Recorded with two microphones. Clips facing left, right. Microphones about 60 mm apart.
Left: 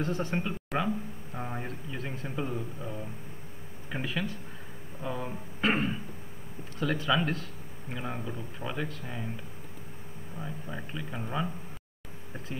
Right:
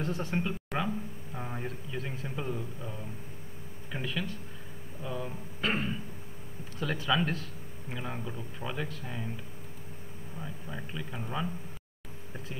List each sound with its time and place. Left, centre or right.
0.0 s speech: centre
3.9 s speech: centre
6.8 s speech: centre
10.4 s speech: centre